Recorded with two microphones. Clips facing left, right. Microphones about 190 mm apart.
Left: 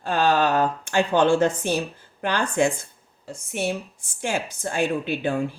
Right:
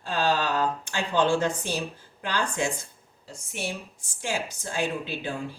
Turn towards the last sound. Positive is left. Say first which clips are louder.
# left 7 dB
turn(degrees=55)  # may be behind; listen again after turning